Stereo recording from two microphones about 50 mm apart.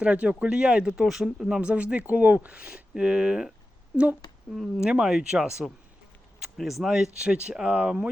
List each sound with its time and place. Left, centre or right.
0.0 s speech: right
1.0 s speech: centre
1.6 s speech: right
4.5 s speech: centre